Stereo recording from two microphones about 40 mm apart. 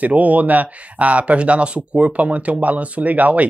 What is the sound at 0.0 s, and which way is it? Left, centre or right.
Speech, right.